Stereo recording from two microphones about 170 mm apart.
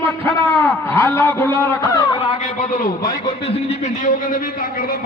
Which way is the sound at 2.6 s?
55° left (ahead or behind).